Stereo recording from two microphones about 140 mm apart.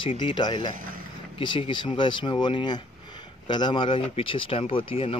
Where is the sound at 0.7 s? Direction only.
80° right.